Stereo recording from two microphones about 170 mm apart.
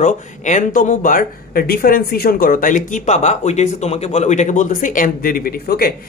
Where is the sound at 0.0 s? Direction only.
45° left (ahead or behind).